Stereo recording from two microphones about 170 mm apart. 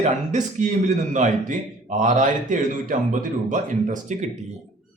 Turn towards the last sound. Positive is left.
turn(degrees=-45)  # may be behind; listen again after turning